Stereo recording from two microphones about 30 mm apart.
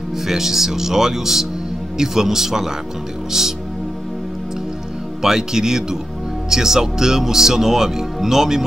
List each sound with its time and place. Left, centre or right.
0.3 s speech: centre
5.2 s speech: centre